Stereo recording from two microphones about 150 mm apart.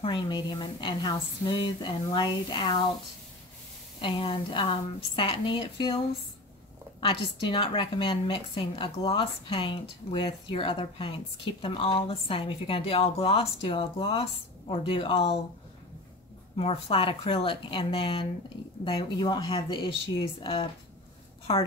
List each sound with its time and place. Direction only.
0.0 s speech: 35° left (ahead or behind)
4.0 s speech: 35° left (ahead or behind)
7.0 s speech: 35° left (ahead or behind)
16.5 s speech: 40° left (ahead or behind)